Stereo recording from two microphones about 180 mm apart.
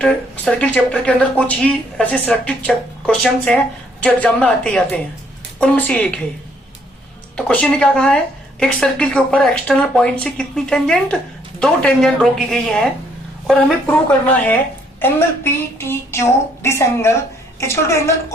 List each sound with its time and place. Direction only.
0.0 s speech: 5° left (ahead or behind)
7.3 s speech: 5° left (ahead or behind)